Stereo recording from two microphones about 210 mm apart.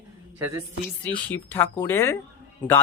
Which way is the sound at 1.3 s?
10° left (ahead or behind).